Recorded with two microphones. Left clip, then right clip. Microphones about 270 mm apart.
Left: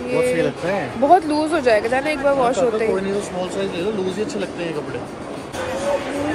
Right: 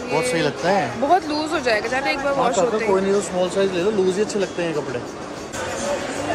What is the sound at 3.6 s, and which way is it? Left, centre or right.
Speech, right.